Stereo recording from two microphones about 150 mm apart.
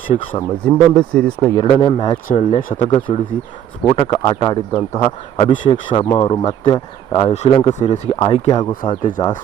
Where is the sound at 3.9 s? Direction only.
30° left (ahead or behind).